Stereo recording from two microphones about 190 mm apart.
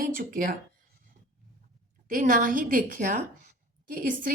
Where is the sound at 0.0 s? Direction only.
45° right (ahead or behind).